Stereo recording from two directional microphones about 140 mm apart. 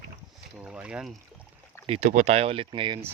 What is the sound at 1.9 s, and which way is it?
Speech, 45° right (ahead or behind).